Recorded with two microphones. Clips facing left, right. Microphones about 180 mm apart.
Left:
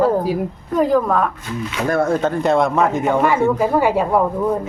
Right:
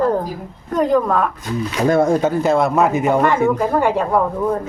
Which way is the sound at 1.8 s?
15° right (ahead or behind).